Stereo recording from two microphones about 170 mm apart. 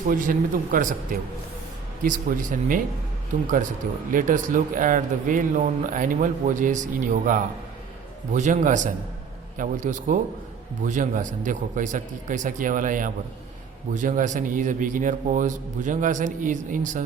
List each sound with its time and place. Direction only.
0.1 s a man's voice: 50° right (ahead or behind)
4.1 s a man's voice: 50° right (ahead or behind)